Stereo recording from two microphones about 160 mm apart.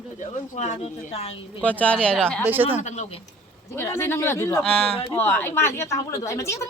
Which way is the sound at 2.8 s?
45° left (ahead or behind).